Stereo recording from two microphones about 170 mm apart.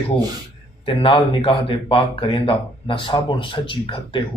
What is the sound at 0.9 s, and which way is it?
Speech, 30° left (ahead or behind).